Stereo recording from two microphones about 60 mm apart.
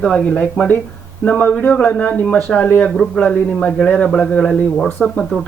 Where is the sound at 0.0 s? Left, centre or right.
Centre.